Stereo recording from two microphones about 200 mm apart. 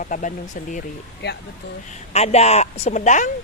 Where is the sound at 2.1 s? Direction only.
30° left (ahead or behind).